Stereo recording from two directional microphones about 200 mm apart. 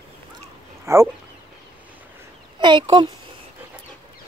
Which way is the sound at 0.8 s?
15° right (ahead or behind).